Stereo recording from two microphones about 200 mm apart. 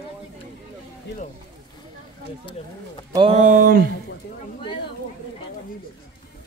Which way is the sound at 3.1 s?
25° right (ahead or behind).